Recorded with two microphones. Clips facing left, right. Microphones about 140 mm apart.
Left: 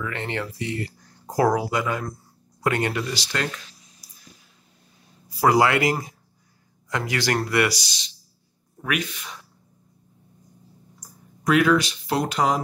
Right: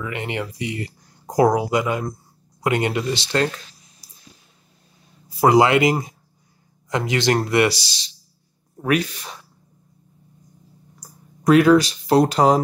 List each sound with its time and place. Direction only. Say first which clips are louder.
0.0 s speech: right 2 dB; 15° right (ahead or behind); by 4.1 s 30° right (ahead or behind)
5.4 s speech: right 4 dB; 20° right (ahead or behind)
11.0 s speech: right 2 dB; 35° right (ahead or behind)